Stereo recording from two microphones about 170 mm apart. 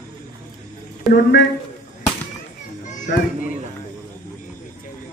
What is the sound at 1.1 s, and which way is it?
Speech, 90° left.